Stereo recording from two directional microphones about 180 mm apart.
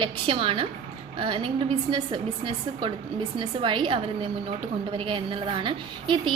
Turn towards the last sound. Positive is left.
turn(degrees=-25)  # may be behind; listen again after turning